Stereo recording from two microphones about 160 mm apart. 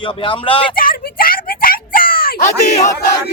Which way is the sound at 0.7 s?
65° left (ahead or behind).